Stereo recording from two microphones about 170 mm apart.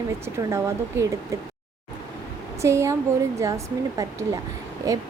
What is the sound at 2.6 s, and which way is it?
A woman's voice, 15° right (ahead or behind).